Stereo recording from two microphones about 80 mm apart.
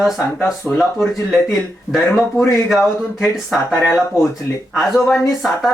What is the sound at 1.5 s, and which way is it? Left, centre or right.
Speech, centre.